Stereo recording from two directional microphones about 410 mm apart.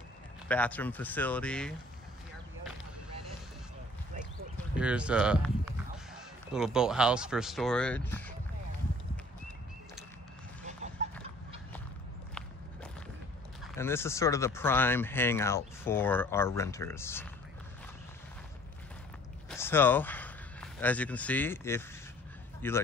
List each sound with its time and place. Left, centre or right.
0.5 s speech: centre
4.7 s speech: centre
10.6 s goose: centre
13.7 s speech: centre
19.5 s a man's voice: centre